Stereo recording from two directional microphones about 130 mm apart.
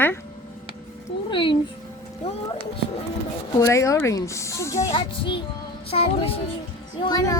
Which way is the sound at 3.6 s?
25° left (ahead or behind).